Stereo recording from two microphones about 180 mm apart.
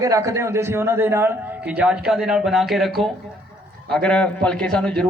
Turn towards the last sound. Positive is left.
turn(degrees=5)  # may be behind; listen again after turning